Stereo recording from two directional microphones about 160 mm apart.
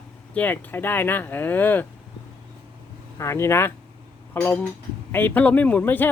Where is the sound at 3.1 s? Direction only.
15° left (ahead or behind).